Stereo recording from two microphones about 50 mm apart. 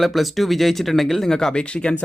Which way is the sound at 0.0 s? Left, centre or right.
Centre.